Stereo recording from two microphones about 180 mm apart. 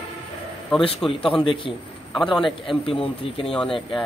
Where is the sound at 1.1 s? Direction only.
30° left (ahead or behind).